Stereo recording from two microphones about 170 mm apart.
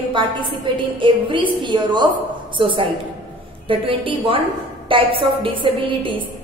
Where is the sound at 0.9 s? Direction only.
30° right (ahead or behind).